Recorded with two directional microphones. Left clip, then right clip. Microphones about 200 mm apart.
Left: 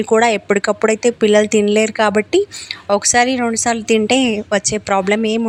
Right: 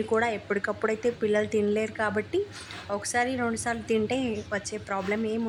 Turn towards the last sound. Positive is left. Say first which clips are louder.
# left 13 dB
turn(degrees=40)  # may be behind; listen again after turning